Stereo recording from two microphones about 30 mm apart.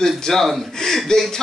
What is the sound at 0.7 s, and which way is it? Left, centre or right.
Speech, centre.